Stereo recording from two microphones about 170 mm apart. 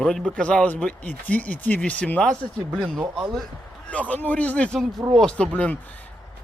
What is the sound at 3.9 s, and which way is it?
Speech, 10° left (ahead or behind).